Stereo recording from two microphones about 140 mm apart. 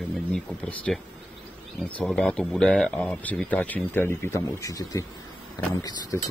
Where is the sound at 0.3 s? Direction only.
5° left (ahead or behind).